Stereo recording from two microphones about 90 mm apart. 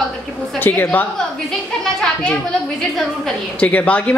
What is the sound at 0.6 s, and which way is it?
Speech, 20° left (ahead or behind).